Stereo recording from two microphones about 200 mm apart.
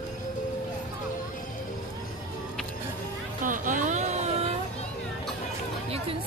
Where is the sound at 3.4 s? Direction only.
40° right (ahead or behind).